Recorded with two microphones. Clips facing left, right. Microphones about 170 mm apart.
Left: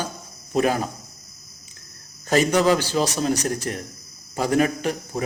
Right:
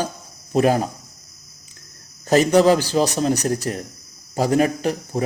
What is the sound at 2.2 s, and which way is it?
A man's voice, 40° right (ahead or behind).